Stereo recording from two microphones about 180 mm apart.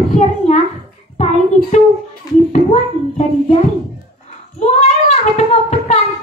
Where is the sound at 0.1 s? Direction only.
40° left (ahead or behind).